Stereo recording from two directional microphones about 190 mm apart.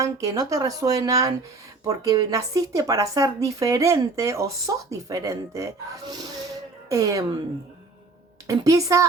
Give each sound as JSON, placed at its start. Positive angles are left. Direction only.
{"t": 0.0, "sound": "a woman's voice", "side_deg": -20}
{"t": 8.4, "sound": "speech", "side_deg": -15}